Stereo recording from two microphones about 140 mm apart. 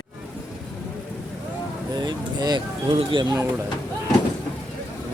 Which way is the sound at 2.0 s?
30° right (ahead or behind).